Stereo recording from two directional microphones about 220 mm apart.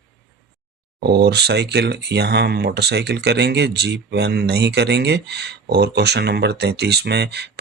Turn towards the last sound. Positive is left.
turn(degrees=-50)  # may be behind; listen again after turning